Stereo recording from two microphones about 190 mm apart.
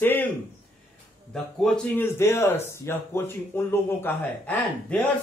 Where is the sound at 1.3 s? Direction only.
Centre (ahead or behind).